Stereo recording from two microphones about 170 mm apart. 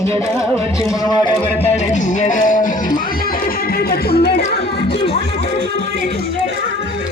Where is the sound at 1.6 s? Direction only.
40° left (ahead or behind); by 4.4 s 70° left (ahead or behind).